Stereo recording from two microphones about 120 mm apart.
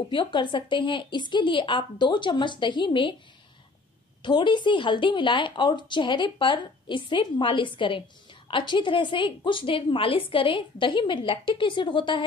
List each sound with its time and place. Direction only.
0.1 s a woman's voice: 40° left (ahead or behind)
4.2 s a woman's voice: 40° left (ahead or behind)